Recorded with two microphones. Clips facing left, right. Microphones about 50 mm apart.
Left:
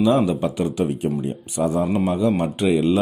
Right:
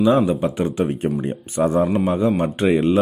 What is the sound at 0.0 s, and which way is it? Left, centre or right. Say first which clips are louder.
Speech: right 2 dB; right.